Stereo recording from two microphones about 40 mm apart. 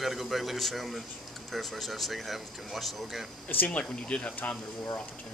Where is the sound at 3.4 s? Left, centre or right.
Left.